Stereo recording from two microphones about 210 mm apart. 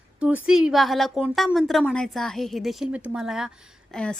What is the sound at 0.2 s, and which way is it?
A woman's voice, 5° right (ahead or behind).